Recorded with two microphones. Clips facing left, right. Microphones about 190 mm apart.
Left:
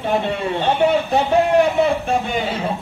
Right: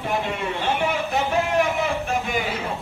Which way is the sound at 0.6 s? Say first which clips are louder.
Left 8 dB; 30° left (ahead or behind).